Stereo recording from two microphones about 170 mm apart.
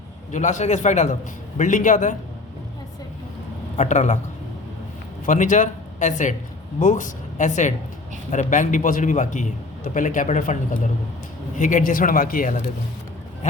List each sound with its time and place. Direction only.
0.3 s a man's voice: 45° left (ahead or behind)
3.8 s a man's voice: 45° left (ahead or behind)
5.2 s a man's voice: 50° left (ahead or behind)